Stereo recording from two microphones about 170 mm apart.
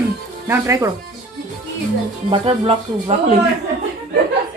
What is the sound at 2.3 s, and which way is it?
Speech, 35° right (ahead or behind).